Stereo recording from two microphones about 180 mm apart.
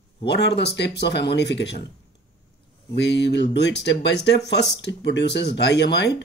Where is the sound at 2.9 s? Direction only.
70° left (ahead or behind).